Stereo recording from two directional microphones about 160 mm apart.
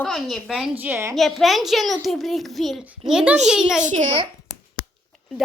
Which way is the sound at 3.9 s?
50° right (ahead or behind).